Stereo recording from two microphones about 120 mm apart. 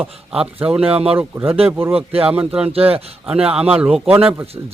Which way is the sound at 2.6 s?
55° right (ahead or behind).